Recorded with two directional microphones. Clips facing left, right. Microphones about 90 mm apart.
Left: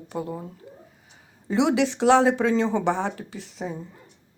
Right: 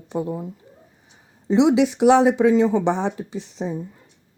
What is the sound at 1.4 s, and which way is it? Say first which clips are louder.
Speech: right 5 dB; 20° right (ahead or behind).